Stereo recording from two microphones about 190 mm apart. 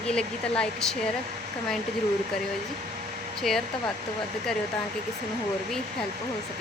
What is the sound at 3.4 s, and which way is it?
Speech, centre (ahead or behind).